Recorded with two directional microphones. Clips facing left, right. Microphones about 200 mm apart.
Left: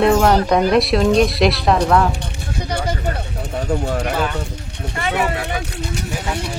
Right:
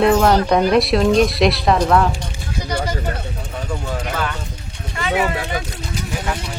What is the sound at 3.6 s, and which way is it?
Speech, 55° left (ahead or behind).